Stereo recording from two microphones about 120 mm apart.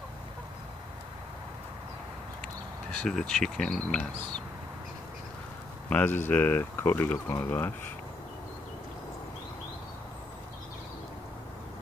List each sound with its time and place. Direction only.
2.4 s speech: 5° left (ahead or behind)
5.9 s speech: 15° left (ahead or behind)